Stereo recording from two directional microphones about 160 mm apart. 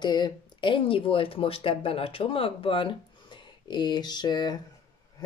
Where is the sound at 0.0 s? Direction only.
25° left (ahead or behind).